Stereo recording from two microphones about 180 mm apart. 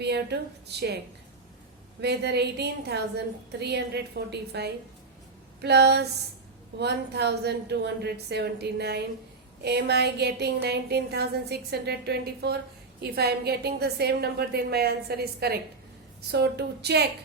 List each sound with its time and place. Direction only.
0.0 s a woman's voice: 70° right (ahead or behind)
2.0 s a woman's voice: 65° right (ahead or behind)